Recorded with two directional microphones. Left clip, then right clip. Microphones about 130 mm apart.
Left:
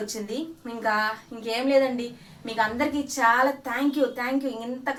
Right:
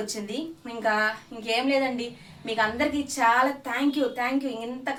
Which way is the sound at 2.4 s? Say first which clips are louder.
Even; 5° right (ahead or behind).